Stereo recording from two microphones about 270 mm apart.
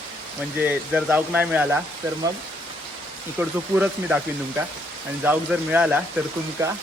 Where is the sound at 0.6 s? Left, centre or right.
Centre.